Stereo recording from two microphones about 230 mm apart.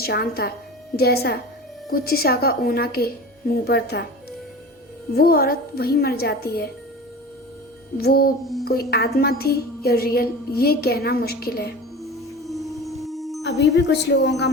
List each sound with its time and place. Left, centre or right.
0.0 s a woman's voice: left
7.9 s a woman's voice: left
12.5 s music: centre
13.4 s a woman's voice: left